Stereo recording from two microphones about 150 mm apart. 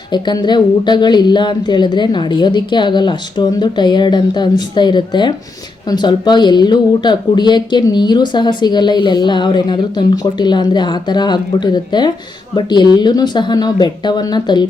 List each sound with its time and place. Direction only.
0.1 s speech: 30° left (ahead or behind)